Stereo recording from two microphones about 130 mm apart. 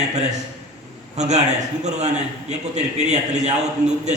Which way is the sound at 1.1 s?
60° right (ahead or behind).